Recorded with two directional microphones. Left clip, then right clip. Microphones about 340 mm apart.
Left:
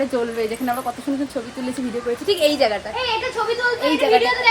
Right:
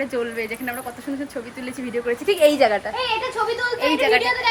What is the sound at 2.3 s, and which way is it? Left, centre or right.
Speech, right.